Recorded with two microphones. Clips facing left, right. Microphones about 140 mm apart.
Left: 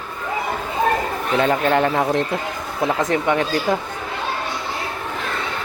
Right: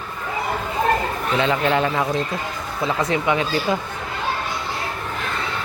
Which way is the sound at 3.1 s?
45° left (ahead or behind).